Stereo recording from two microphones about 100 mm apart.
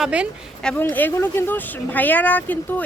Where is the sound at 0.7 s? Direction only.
20° left (ahead or behind).